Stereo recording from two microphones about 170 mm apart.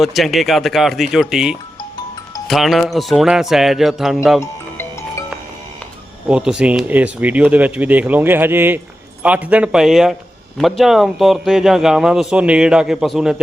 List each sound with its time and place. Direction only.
0.0 s speech: centre (ahead or behind)
4.4 s music: 15° left (ahead or behind)
6.2 s speech: 5° right (ahead or behind)